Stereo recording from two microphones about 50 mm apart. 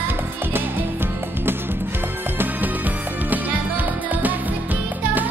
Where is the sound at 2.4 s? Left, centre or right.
Right.